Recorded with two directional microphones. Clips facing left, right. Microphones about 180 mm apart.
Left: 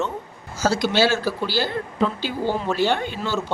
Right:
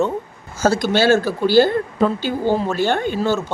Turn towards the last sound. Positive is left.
turn(degrees=-45)  # may be behind; listen again after turning